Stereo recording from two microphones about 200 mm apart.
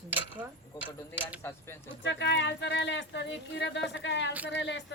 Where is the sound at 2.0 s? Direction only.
60° left (ahead or behind).